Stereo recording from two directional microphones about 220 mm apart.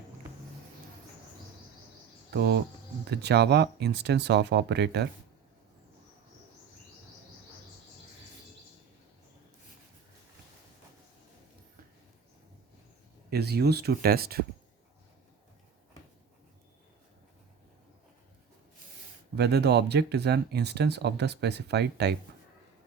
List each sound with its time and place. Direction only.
2.3 s speech: 45° right (ahead or behind)
13.3 s speech: 45° right (ahead or behind)
19.4 s speech: 50° right (ahead or behind)